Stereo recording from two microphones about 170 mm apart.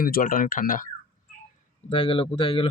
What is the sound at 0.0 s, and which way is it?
Speech, 55° left (ahead or behind).